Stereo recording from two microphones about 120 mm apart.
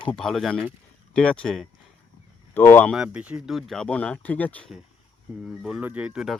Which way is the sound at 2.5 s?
15° left (ahead or behind).